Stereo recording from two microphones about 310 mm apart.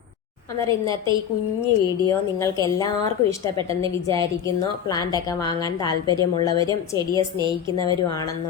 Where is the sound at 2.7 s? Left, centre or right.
Centre.